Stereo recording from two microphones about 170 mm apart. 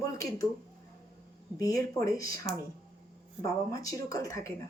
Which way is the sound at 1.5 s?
20° left (ahead or behind).